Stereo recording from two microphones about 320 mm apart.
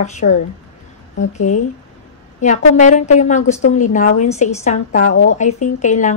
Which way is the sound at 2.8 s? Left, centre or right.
Left.